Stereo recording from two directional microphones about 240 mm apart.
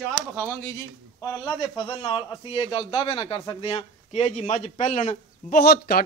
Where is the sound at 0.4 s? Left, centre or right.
Centre.